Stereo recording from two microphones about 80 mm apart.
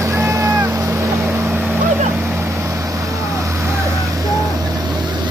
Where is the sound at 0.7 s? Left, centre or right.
Right.